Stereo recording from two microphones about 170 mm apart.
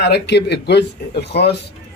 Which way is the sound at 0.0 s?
80° left.